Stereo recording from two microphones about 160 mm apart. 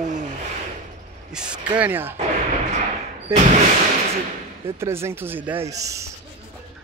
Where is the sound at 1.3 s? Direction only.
5° right (ahead or behind).